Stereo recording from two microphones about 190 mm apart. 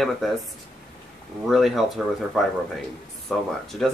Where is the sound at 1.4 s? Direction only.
Centre (ahead or behind).